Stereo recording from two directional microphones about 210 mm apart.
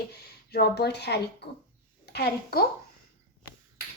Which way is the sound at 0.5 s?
50° left (ahead or behind).